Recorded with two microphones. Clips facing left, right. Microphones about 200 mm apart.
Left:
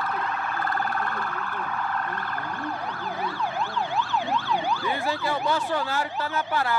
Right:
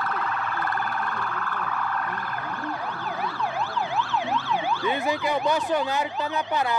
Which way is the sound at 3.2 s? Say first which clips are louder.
Even; centre (ahead or behind).